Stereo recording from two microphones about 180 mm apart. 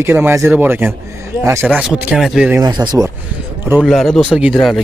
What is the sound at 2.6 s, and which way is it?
Speech, 25° right (ahead or behind).